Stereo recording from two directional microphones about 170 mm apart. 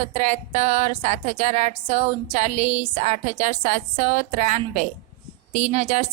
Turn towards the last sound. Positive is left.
turn(degrees=-40)  # may be behind; listen again after turning